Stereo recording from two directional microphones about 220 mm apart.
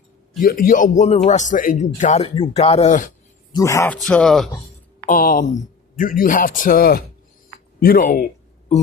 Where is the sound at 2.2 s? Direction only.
20° left (ahead or behind).